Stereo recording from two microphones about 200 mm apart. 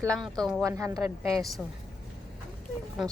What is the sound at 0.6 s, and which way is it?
Speech, 15° right (ahead or behind).